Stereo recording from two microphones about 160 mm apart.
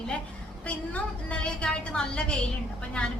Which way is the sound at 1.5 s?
5° left (ahead or behind).